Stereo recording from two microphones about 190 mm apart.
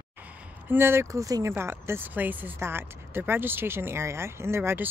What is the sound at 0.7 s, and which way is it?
Speech, 10° right (ahead or behind).